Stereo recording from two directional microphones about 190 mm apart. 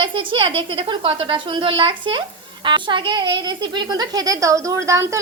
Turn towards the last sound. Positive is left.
turn(degrees=-15)  # may be behind; listen again after turning